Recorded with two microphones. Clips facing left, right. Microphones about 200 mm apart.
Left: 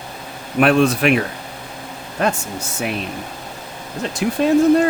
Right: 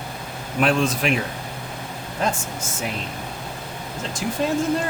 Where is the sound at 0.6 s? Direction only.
65° left (ahead or behind).